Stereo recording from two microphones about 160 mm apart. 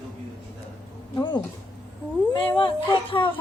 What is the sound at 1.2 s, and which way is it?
A woman's voice, 30° left (ahead or behind).